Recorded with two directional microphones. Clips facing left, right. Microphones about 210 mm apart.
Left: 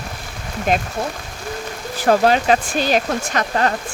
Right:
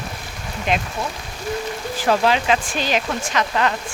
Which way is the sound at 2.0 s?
45° left (ahead or behind).